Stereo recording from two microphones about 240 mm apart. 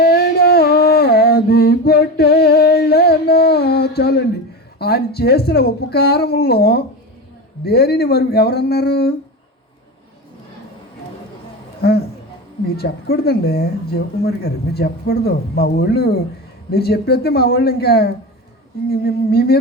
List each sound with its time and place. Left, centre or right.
0.0 s mantra: left
4.8 s speech: left
11.8 s a sound: left
12.7 s speech: left